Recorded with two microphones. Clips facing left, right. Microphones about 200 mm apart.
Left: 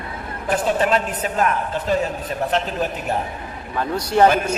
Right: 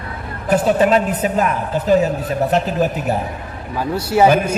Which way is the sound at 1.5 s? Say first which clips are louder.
Right 6 dB; 40° right (ahead or behind).